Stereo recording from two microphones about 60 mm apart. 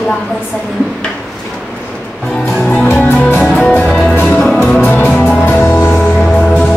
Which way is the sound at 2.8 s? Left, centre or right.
Left.